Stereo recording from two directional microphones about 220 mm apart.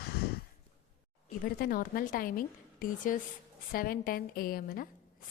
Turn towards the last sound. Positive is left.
turn(degrees=40)  # may be behind; listen again after turning